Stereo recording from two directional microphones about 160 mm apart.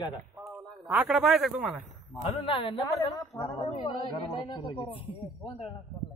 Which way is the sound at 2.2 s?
35° left (ahead or behind).